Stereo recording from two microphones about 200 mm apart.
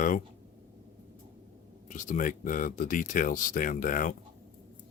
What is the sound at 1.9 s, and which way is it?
Speech, 40° left (ahead or behind).